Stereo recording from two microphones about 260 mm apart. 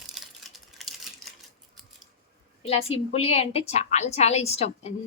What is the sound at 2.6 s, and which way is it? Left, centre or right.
A woman's voice, left.